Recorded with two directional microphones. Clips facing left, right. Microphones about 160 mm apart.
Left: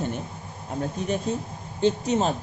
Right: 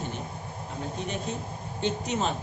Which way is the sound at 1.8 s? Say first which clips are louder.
Left 6 dB; 35° left (ahead or behind).